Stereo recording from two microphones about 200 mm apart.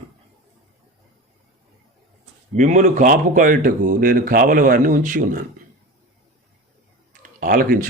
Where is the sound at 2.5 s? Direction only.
35° right (ahead or behind).